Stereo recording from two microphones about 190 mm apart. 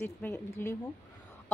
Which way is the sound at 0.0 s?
15° left (ahead or behind).